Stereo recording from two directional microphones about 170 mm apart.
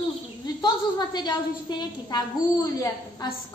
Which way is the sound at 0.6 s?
25° left (ahead or behind).